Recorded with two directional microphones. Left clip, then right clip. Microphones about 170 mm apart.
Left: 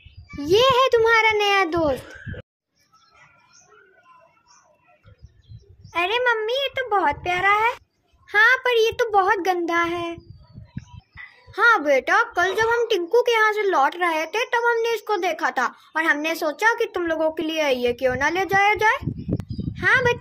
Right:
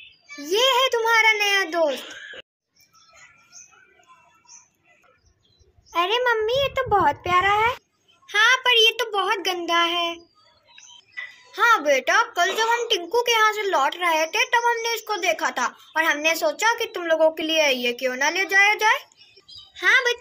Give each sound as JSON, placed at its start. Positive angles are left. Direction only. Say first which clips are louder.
{"t": 0.5, "sound": "a child's voice", "louder": "left 3 dB", "side_deg": 50}
{"t": 5.9, "sound": "a child's voice", "louder": "even", "side_deg": 0}
{"t": 8.3, "sound": "a child's voice", "louder": "left 1 dB", "side_deg": 55}
{"t": 11.5, "sound": "a child's voice", "louder": "left 1 dB", "side_deg": 50}